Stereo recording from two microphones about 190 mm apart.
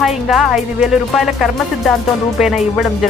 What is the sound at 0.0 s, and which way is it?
Speech, centre (ahead or behind).